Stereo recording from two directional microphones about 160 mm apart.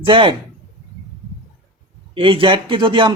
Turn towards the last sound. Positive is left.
turn(degrees=-30)  # may be behind; listen again after turning